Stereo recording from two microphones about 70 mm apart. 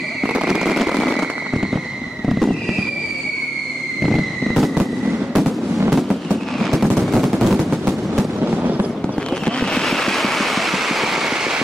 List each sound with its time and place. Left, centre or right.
0.3 s fireworks: centre
4.0 s fireworks: centre
5.9 s fireworks: centre
7.0 s machine gun: centre
7.5 s machine gun: centre
8.5 s fireworks: right
9.6 s vehicle: centre